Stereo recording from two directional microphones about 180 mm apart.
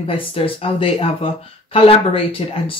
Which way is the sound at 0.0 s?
30° left (ahead or behind).